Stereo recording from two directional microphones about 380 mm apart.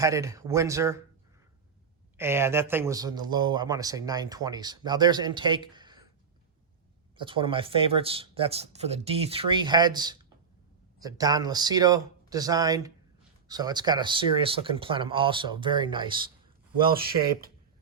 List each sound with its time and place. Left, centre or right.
0.0 s speech: centre
2.1 s speech: centre
7.2 s speech: centre
16.9 s speech: right